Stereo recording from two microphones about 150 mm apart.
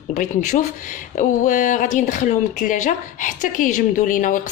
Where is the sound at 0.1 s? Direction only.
60° left (ahead or behind).